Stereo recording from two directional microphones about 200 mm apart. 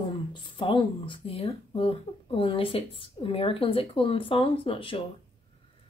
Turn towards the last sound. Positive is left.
turn(degrees=25)  # may be behind; listen again after turning